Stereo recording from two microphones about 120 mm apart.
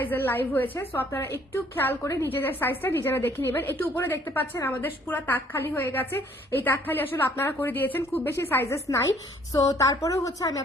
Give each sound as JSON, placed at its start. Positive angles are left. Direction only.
{"t": 0.0, "sound": "a woman's voice", "side_deg": 15}